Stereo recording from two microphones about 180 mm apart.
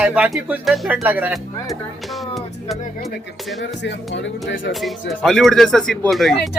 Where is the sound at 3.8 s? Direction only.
75° left (ahead or behind).